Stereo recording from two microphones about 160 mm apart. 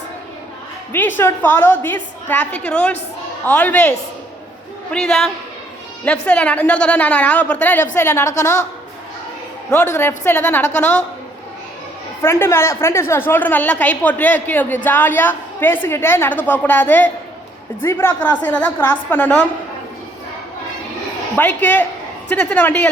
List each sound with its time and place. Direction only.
0.9 s a woman's voice: 10° left (ahead or behind)
9.6 s a woman's voice: 15° left (ahead or behind)
12.2 s a woman's voice: 15° left (ahead or behind)
21.3 s a woman's voice: 10° left (ahead or behind)